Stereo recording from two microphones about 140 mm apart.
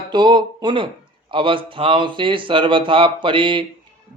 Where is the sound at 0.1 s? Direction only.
30° right (ahead or behind).